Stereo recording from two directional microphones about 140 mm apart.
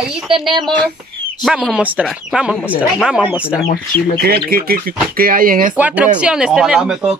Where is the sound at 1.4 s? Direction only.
5° right (ahead or behind).